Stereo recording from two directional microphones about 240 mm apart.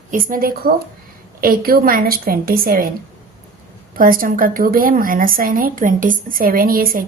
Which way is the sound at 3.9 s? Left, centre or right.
Right.